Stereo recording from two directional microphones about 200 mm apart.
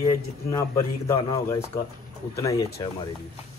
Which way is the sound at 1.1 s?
20° left (ahead or behind).